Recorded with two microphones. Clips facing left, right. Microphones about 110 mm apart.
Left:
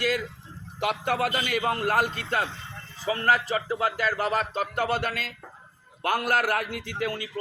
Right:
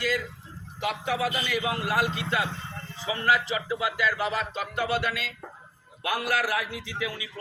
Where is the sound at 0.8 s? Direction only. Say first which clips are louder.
Left 2 dB; 55° left (ahead or behind).